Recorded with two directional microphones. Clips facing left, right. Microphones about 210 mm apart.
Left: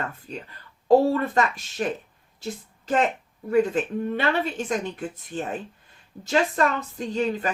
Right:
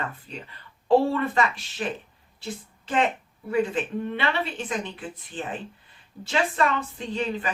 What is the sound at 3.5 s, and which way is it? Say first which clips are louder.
Speech: left 3 dB; 40° left (ahead or behind).